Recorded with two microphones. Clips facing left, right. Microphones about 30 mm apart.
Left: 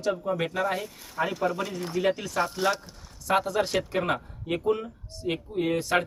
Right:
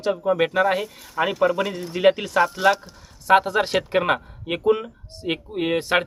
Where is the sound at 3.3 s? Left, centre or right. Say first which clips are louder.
Right 7 dB; right.